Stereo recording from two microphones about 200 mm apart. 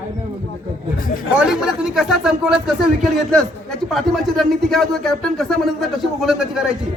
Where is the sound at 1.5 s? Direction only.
5° right (ahead or behind).